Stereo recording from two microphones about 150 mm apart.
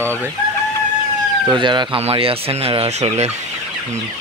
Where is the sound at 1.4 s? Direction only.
30° right (ahead or behind); by 3.3 s 45° right (ahead or behind).